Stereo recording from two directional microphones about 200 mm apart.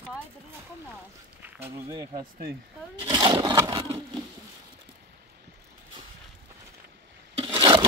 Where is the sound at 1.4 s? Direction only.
15° right (ahead or behind).